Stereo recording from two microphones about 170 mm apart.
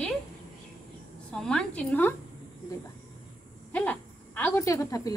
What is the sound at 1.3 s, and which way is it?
Speech, 5° left (ahead or behind).